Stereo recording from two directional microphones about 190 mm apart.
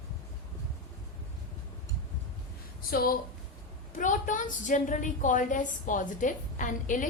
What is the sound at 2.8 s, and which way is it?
A woman's voice, 50° left (ahead or behind).